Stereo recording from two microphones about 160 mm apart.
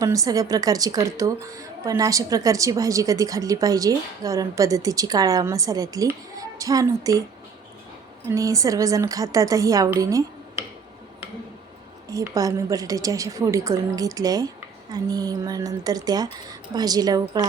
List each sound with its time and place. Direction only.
0.0 s a woman's voice: 20° right (ahead or behind)
8.3 s a woman's voice: 20° right (ahead or behind)
12.3 s a woman's voice: 20° right (ahead or behind)